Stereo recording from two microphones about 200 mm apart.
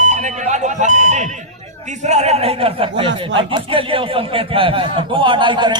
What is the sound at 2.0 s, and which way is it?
A man's voice, 35° right (ahead or behind).